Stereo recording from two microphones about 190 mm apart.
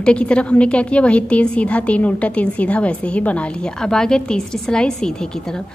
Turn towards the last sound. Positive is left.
turn(degrees=5)  # may be behind; listen again after turning